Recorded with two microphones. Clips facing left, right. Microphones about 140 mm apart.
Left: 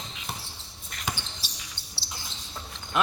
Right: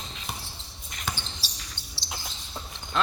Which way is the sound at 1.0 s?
15° left (ahead or behind).